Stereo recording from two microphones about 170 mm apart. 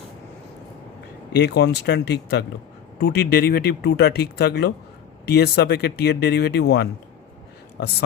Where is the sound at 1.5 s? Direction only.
75° left (ahead or behind).